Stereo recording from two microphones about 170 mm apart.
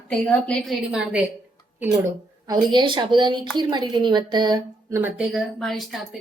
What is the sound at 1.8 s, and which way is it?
A woman's voice, 15° right (ahead or behind).